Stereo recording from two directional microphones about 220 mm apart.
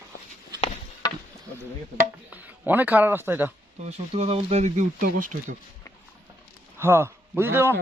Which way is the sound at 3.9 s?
30° right (ahead or behind).